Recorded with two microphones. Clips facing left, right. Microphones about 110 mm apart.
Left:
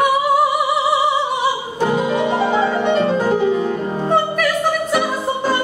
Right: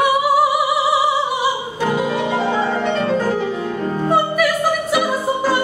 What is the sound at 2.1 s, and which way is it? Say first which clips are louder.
Music: left 2 dB; 15° left (ahead or behind).